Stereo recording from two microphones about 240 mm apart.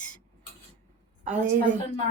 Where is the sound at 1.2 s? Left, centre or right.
Right.